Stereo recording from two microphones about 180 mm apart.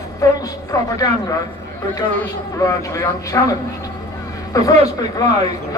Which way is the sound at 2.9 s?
20° left (ahead or behind).